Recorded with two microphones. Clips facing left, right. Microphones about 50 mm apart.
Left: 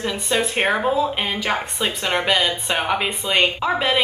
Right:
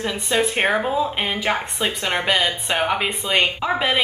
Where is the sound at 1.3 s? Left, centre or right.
Centre.